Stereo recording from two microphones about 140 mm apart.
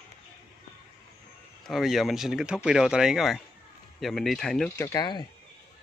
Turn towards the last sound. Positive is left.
turn(degrees=30)  # may be behind; listen again after turning